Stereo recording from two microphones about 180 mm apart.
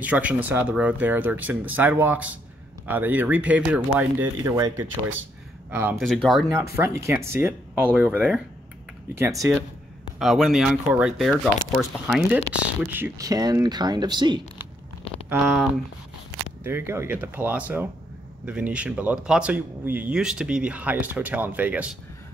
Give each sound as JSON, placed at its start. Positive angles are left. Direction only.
{"t": 0.0, "sound": "speech", "side_deg": -10}
{"t": 6.5, "sound": "speech", "side_deg": -15}
{"t": 10.1, "sound": "speech", "side_deg": 0}
{"t": 12.9, "sound": "speech", "side_deg": -15}
{"t": 15.2, "sound": "a sound", "side_deg": -10}
{"t": 16.6, "sound": "speech", "side_deg": -10}